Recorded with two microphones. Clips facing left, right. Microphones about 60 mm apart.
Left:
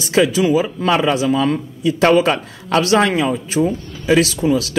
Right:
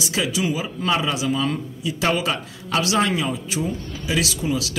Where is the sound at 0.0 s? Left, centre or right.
Left.